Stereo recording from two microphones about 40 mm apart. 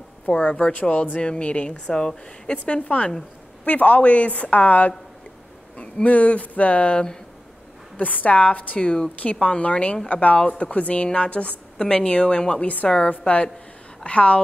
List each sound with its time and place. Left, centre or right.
0.4 s a woman's voice: left
2.6 s a woman's voice: left
6.0 s a woman's voice: left